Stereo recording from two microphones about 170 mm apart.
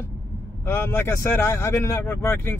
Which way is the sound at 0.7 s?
15° left (ahead or behind).